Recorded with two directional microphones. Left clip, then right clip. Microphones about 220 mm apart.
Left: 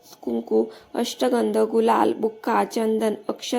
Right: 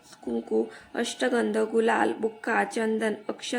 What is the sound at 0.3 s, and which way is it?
A woman's voice, 15° left (ahead or behind).